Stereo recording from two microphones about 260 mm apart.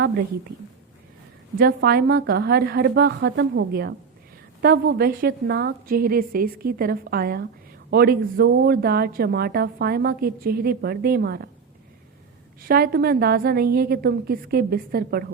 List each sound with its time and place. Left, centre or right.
1.5 s speech: right
12.6 s speech: right